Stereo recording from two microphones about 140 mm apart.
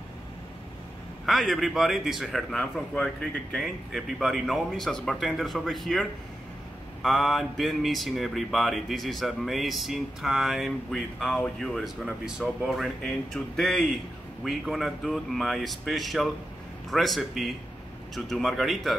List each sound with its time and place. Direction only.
1.2 s speech: centre (ahead or behind)